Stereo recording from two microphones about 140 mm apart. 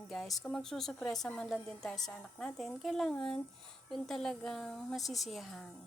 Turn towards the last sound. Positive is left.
turn(degrees=0)  # may be behind; listen again after turning